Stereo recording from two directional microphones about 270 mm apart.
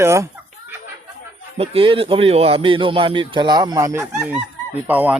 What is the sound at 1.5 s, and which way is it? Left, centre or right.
Speech, right.